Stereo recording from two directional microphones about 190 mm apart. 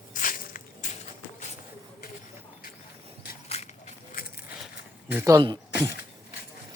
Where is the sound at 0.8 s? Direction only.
40° left (ahead or behind).